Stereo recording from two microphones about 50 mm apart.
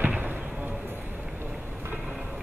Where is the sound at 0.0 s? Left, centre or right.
Right.